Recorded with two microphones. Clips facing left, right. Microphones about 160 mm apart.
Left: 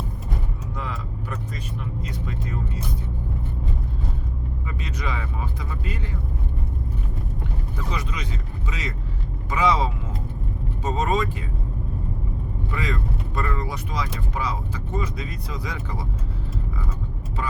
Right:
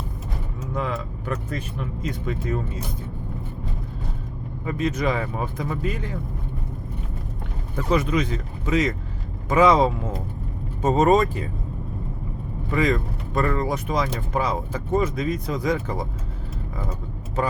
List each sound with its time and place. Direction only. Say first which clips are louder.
0.7 s vehicle: right 7 dB; 50° right (ahead or behind)
2.0 s speech: right 5 dB; 55° right (ahead or behind)
4.6 s speech: right 11 dB; 45° right (ahead or behind)
7.9 s speech: right 10 dB; 55° right (ahead or behind)
12.7 s speech: right 8 dB; 45° right (ahead or behind)